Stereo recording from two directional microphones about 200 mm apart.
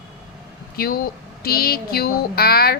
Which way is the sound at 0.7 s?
45° left (ahead or behind).